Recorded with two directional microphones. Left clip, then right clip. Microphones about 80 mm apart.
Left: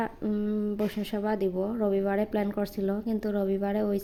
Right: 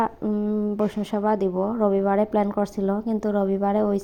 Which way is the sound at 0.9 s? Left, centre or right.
Right.